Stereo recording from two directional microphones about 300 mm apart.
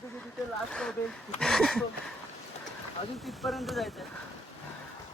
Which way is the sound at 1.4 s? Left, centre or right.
Centre.